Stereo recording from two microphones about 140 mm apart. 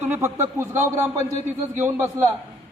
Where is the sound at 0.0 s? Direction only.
20° right (ahead or behind).